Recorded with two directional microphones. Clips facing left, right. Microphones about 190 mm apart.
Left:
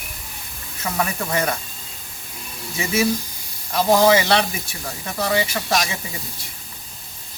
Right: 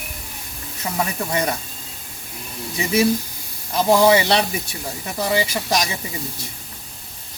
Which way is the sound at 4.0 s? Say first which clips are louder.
Right 1 dB; 20° right (ahead or behind).